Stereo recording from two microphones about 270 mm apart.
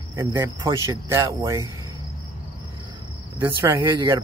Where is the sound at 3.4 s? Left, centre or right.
Right.